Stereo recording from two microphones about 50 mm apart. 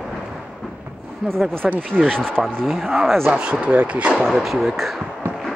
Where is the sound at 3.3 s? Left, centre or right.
Right.